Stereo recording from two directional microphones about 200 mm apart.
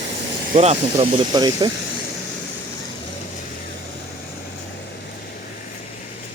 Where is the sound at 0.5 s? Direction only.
30° right (ahead or behind).